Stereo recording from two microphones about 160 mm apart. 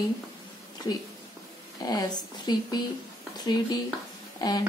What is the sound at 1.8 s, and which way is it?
Speech, 25° left (ahead or behind).